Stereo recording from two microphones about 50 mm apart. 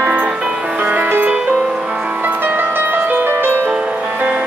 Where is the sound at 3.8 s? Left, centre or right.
Right.